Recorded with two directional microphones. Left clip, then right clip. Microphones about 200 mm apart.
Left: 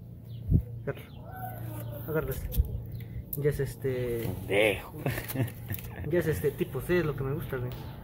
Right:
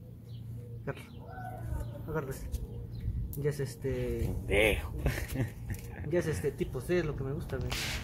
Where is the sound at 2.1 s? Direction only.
Centre (ahead or behind).